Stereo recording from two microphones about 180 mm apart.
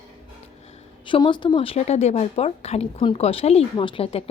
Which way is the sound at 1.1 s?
25° left (ahead or behind).